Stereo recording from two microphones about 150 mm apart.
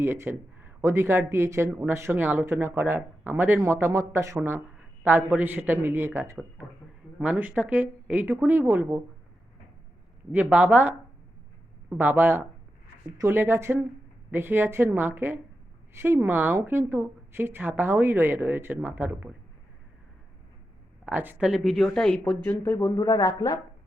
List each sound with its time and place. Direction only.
0.0 s speech: 15° right (ahead or behind)
10.3 s speech: 10° right (ahead or behind)
21.0 s speech: 10° right (ahead or behind); by 22.4 s 5° left (ahead or behind)
22.4 s speech: 15° left (ahead or behind)